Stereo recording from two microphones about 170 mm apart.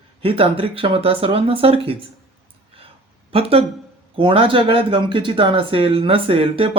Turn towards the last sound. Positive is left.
turn(degrees=-35)  # may be behind; listen again after turning